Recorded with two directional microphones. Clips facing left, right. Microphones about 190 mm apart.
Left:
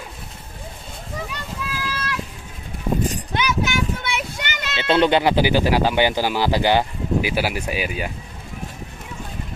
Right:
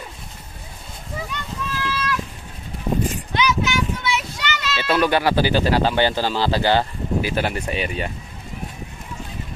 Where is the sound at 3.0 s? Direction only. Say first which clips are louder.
Right 1 dB; 50° left (ahead or behind).